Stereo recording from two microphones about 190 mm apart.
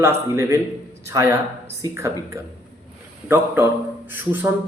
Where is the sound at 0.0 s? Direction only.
15° right (ahead or behind).